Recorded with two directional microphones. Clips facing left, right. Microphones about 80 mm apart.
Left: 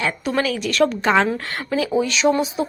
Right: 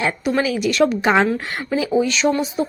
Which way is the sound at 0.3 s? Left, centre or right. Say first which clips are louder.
Right 3 dB; centre.